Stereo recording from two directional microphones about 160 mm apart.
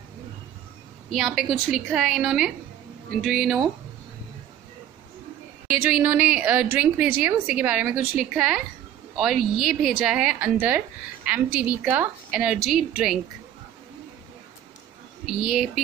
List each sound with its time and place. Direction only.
1.1 s a woman's voice: centre (ahead or behind)
5.7 s a woman's voice: 10° right (ahead or behind)
15.2 s a woman's voice: 5° right (ahead or behind)